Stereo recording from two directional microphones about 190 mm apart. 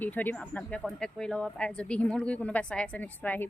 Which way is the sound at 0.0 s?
10° left (ahead or behind).